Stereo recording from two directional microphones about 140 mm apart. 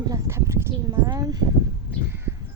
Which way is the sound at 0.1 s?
20° right (ahead or behind).